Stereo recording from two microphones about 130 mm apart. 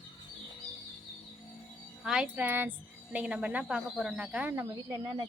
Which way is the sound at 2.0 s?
5° right (ahead or behind).